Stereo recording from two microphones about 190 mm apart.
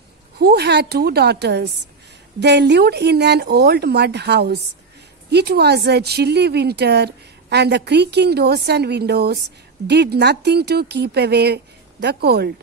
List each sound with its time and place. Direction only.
0.4 s speech: 60° right (ahead or behind)